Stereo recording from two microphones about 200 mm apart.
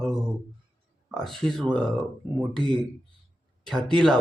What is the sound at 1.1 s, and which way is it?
Speech, 5° left (ahead or behind).